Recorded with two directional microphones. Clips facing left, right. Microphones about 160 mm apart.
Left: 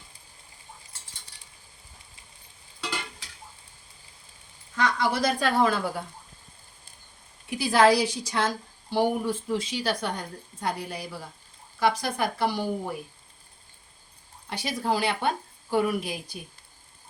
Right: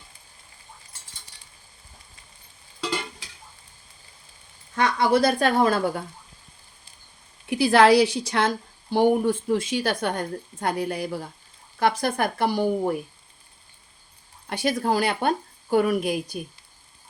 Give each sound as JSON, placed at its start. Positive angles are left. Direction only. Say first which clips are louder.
{"t": 4.7, "sound": "speech", "louder": "right 5 dB", "side_deg": -60}
{"t": 7.5, "sound": "a woman's voice", "louder": "right 4 dB", "side_deg": -65}
{"t": 14.5, "sound": "speech", "louder": "right 5 dB", "side_deg": -50}